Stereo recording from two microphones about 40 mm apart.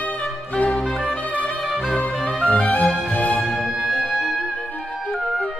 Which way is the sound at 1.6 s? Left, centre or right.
Centre.